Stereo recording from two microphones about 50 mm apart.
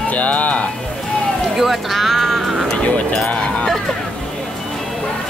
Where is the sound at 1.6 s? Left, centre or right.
Centre.